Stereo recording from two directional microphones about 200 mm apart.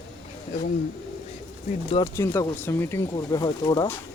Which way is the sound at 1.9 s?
20° left (ahead or behind).